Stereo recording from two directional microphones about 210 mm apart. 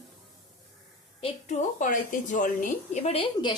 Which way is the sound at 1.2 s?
35° left (ahead or behind).